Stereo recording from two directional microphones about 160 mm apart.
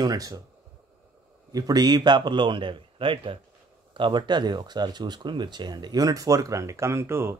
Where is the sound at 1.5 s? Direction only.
25° right (ahead or behind).